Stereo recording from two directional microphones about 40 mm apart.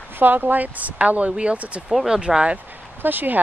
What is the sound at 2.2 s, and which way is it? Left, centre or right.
Speech, right.